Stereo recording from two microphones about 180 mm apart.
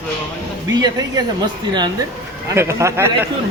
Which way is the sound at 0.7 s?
20° right (ahead or behind).